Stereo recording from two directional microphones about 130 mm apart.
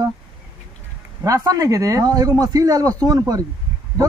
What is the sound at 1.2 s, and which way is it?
A man's voice, 25° right (ahead or behind).